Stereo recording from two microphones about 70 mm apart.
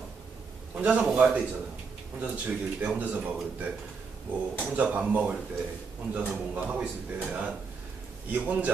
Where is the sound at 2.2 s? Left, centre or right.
Right.